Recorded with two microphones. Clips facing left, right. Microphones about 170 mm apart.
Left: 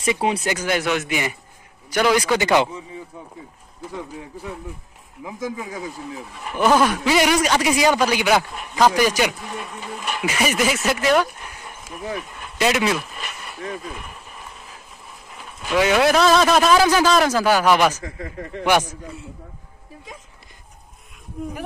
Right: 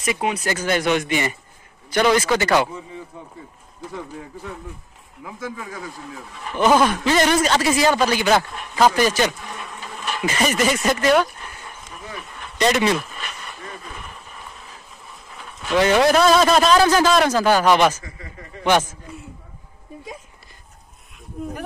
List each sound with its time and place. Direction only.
0.0 s speech: 30° left (ahead or behind)
0.5 s speech: 10° left (ahead or behind)
3.9 s speech: 10° left (ahead or behind)
15.6 s a man's voice: 5° left (ahead or behind)
18.0 s speech: 55° left (ahead or behind)
18.6 s speech: 10° left (ahead or behind)
21.4 s a man's voice: centre (ahead or behind)